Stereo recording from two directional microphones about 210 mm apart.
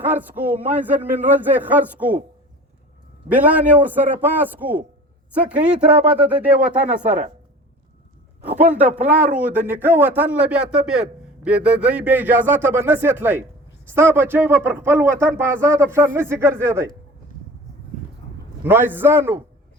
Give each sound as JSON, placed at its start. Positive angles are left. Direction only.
{"t": 0.0, "sound": "speech", "side_deg": -10}
{"t": 3.2, "sound": "speech", "side_deg": -5}
{"t": 7.0, "sound": "a woman's voice", "side_deg": -35}
{"t": 9.0, "sound": "speech", "side_deg": -10}
{"t": 18.6, "sound": "speech", "side_deg": -10}